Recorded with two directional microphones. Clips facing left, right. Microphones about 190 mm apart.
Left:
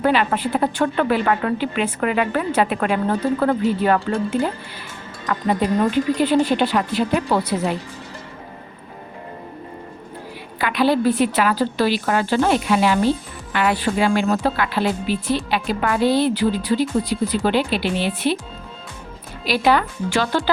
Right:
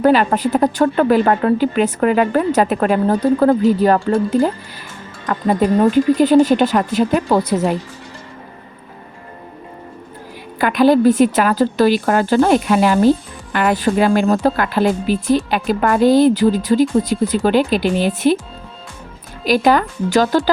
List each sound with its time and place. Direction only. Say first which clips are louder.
0.0 s a woman's voice: right 5 dB; 40° right (ahead or behind)
10.6 s a woman's voice: right 6 dB; 45° right (ahead or behind)
19.5 s a woman's voice: right 4 dB; 45° right (ahead or behind)